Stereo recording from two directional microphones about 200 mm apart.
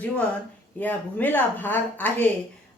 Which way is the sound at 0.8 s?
10° left (ahead or behind).